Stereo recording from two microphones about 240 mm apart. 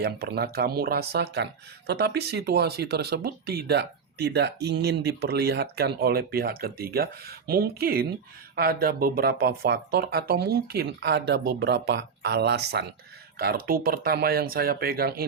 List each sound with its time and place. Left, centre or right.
0.0 s speech: right